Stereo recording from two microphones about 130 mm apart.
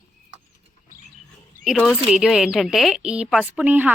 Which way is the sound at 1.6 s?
5° right (ahead or behind).